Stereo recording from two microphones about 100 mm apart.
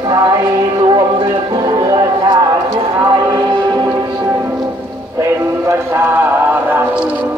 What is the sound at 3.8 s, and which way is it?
Music, 25° right (ahead or behind).